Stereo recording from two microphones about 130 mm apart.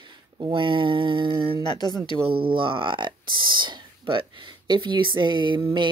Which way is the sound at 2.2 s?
45° right (ahead or behind).